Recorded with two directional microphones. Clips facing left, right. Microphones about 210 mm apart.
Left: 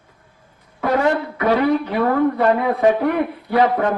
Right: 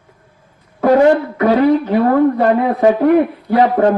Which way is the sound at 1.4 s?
35° right (ahead or behind).